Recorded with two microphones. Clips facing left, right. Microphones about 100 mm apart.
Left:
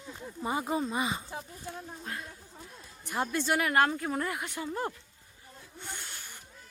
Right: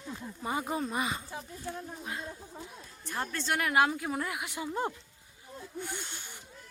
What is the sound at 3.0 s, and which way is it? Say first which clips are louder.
Speech: left 4 dB; 15° left (ahead or behind).